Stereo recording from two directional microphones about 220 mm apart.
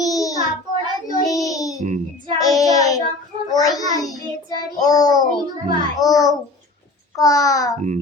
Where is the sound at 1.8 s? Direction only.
35° right (ahead or behind).